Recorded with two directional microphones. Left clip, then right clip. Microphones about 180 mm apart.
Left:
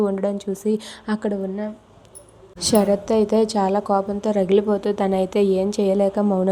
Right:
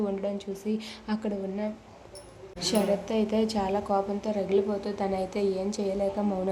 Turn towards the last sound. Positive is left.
turn(degrees=35)  # may be behind; listen again after turning